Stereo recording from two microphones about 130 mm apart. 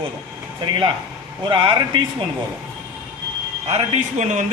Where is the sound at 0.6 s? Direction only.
40° right (ahead or behind).